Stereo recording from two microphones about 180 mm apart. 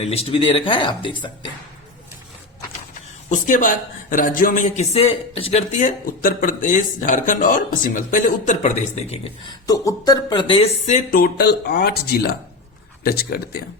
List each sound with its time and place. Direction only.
0.0 s speech: 35° left (ahead or behind)
3.2 s a man's voice: 45° left (ahead or behind)
9.6 s speech: 20° left (ahead or behind)
10.8 s speech: 45° left (ahead or behind)
13.1 s speech: 60° left (ahead or behind)